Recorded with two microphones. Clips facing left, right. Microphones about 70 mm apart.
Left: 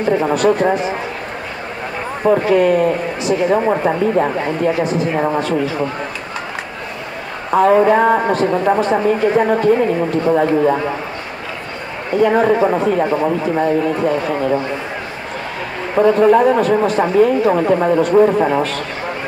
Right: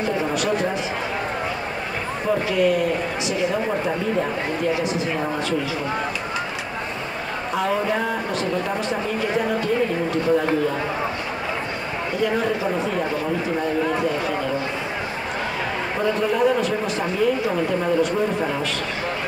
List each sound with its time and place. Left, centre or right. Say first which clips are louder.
0.3 s speech: left 8 dB; left
2.2 s speech: left 8 dB; left
7.5 s speech: left 12 dB; left
12.2 s speech: left 10 dB; left
16.0 s speech: left 10 dB; left